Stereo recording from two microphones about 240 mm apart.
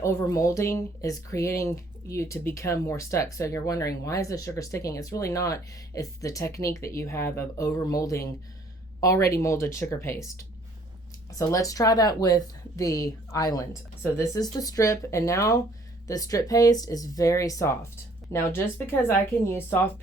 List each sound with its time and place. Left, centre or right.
0.0 s speech: centre
11.3 s speech: centre